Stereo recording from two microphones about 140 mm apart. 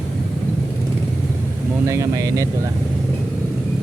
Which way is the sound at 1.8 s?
25° right (ahead or behind).